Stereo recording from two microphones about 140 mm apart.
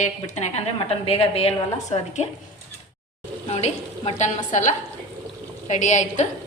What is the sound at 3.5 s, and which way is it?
Speech, 50° left (ahead or behind).